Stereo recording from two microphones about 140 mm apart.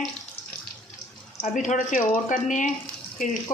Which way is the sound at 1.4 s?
60° left (ahead or behind).